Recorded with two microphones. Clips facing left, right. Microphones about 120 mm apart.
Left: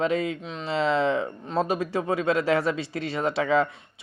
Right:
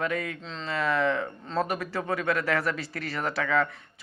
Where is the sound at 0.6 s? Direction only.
25° left (ahead or behind).